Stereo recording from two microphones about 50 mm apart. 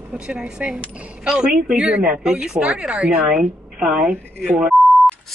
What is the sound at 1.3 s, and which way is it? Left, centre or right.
Speech, centre.